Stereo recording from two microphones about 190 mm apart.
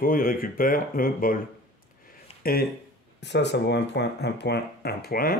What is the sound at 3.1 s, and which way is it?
Speech, 65° left (ahead or behind).